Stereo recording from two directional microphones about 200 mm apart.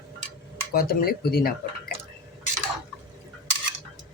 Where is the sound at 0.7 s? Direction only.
50° left (ahead or behind).